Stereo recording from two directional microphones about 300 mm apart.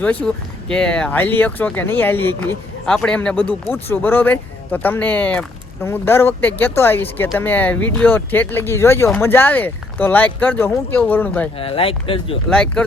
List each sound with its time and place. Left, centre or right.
0.0 s speech: centre
11.5 s speech: centre
12.5 s speech: centre